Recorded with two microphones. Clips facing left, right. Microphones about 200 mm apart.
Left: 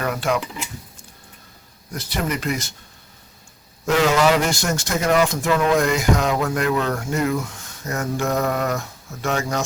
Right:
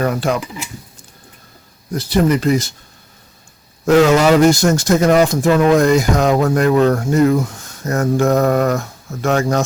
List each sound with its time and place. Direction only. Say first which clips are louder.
0.0 s speech: right 5 dB; 35° right (ahead or behind)
1.9 s speech: right 10 dB; 35° right (ahead or behind)
3.8 s speech: right 6 dB; 45° right (ahead or behind)
7.9 s mantra: right 8 dB; 45° right (ahead or behind)